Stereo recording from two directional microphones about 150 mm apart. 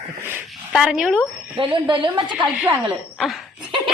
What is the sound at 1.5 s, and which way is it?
Speech, 35° right (ahead or behind).